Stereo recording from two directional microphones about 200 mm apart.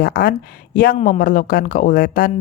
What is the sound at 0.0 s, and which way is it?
A woman's voice, 45° left (ahead or behind).